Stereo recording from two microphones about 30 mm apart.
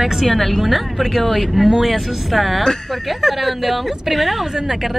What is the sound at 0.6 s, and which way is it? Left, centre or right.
A woman's voice, centre.